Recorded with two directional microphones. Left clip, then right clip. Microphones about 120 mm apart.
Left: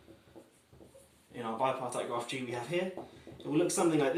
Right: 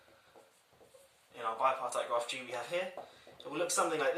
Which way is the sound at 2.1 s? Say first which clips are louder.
Right 1 dB; 10° left (ahead or behind).